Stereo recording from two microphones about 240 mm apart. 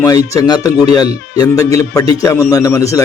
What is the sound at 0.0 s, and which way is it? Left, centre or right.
A man's voice, centre.